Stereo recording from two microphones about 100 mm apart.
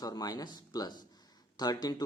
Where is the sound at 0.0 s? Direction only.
40° left (ahead or behind).